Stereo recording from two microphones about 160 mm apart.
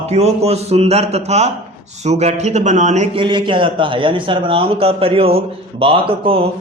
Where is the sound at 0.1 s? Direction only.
40° right (ahead or behind).